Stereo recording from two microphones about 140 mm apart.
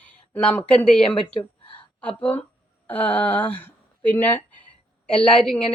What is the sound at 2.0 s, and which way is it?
A woman's voice, 10° left (ahead or behind).